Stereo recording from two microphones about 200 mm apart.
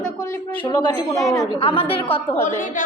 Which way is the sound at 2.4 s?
40° left (ahead or behind).